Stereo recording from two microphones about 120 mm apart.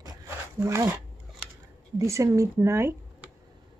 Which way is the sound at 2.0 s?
25° right (ahead or behind).